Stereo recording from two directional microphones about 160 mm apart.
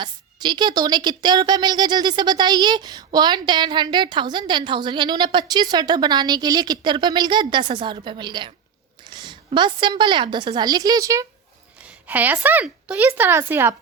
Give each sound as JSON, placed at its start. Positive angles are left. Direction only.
{"t": 0.0, "sound": "a woman's voice", "side_deg": -25}
{"t": 9.1, "sound": "a sound", "side_deg": -30}
{"t": 9.6, "sound": "speech", "side_deg": -30}
{"t": 12.0, "sound": "speech", "side_deg": -10}